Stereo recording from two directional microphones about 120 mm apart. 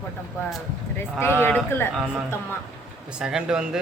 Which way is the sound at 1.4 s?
20° left (ahead or behind).